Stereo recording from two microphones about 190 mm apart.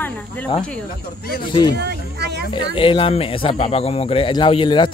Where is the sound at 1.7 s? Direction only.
60° right (ahead or behind).